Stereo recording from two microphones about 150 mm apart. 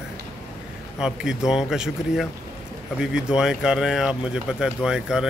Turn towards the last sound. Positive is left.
turn(degrees=-5)  # may be behind; listen again after turning